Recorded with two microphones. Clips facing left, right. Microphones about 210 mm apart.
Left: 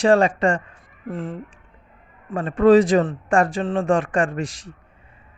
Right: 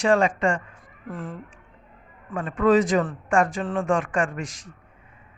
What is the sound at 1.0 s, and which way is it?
A man's voice, 25° left (ahead or behind).